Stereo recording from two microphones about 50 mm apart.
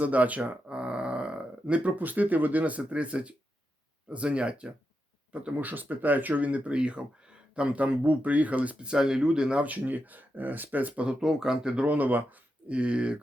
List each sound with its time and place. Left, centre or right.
0.0 s speech: right
5.6 s speech: right
8.8 s speech: centre
9.6 s speech: right
11.0 s speech: centre
11.8 s speech: right